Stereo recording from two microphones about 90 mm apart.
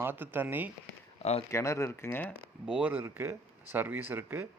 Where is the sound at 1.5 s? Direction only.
30° left (ahead or behind).